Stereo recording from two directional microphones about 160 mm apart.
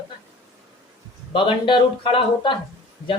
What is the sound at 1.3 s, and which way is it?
A woman's voice, 30° left (ahead or behind).